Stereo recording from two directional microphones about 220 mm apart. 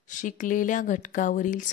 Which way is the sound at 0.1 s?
35° left (ahead or behind).